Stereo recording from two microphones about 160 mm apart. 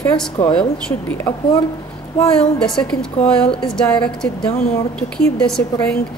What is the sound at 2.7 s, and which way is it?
A woman's voice, 5° left (ahead or behind).